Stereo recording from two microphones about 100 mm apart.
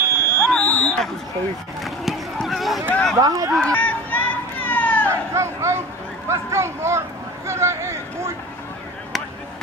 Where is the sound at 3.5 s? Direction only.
10° left (ahead or behind).